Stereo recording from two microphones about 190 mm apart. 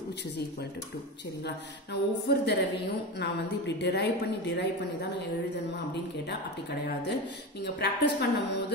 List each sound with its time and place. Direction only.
1.4 s a woman's voice: 60° left (ahead or behind)
6.2 s a woman's voice: 60° left (ahead or behind)